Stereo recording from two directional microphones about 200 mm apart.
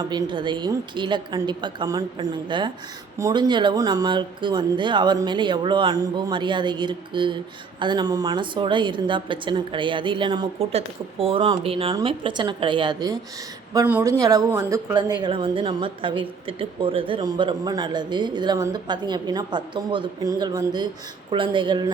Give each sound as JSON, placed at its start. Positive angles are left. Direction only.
{"t": 0.0, "sound": "a woman's voice", "side_deg": -20}